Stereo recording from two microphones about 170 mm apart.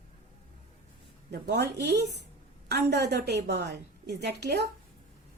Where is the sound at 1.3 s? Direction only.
75° right (ahead or behind).